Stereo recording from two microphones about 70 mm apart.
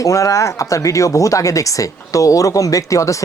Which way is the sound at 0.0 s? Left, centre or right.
Left.